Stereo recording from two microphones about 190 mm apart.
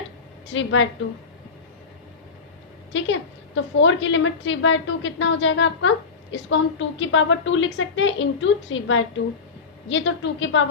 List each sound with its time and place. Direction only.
0.5 s a woman's voice: 85° left
2.9 s a woman's voice: 85° left